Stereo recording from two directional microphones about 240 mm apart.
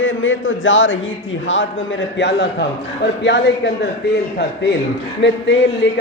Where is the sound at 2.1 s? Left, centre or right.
Left.